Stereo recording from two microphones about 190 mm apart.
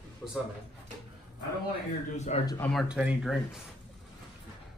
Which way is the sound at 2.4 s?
15° left (ahead or behind).